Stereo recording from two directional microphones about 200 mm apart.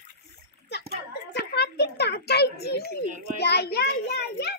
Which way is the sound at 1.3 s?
55° left (ahead or behind).